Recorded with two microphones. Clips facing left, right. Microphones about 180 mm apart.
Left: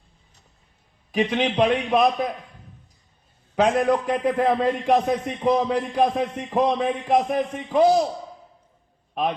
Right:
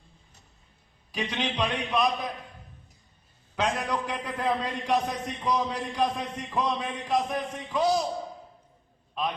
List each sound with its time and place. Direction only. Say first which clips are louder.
1.1 s a man's voice: left 9 dB; 55° left (ahead or behind)
3.5 s a man's voice: left 9 dB; 55° left (ahead or behind)